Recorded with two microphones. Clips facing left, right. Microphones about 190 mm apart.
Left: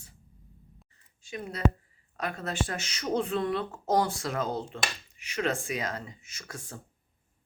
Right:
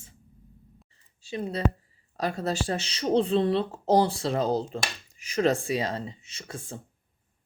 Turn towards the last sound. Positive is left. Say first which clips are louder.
# right 4 dB
turn(degrees=-25)  # may be behind; listen again after turning